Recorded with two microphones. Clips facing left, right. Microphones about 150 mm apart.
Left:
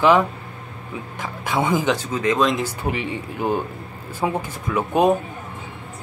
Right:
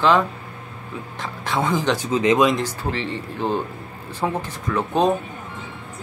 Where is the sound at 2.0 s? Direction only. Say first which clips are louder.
Right 3 dB; 20° right (ahead or behind).